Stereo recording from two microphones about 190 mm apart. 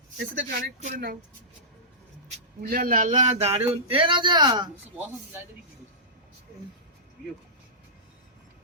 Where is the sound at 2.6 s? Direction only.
45° right (ahead or behind); by 4.7 s 20° right (ahead or behind).